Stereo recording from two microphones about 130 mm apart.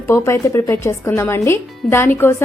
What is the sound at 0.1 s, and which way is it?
A woman's voice, 20° left (ahead or behind).